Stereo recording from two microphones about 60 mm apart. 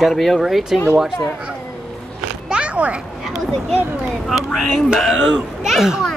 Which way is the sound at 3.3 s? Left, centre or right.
Centre.